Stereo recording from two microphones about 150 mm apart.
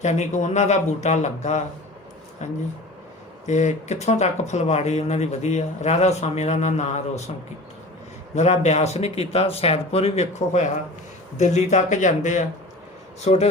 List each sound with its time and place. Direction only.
0.0 s speech: 50° left (ahead or behind)
8.4 s speech: 50° left (ahead or behind)